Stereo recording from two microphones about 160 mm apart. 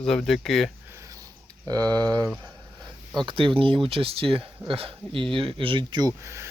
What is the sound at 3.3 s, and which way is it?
Speech, 35° right (ahead or behind).